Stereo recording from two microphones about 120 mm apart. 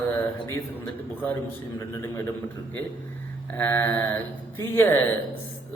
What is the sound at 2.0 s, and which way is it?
Speech, 20° left (ahead or behind).